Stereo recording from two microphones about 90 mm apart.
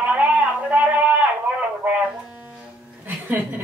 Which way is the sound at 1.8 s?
15° right (ahead or behind).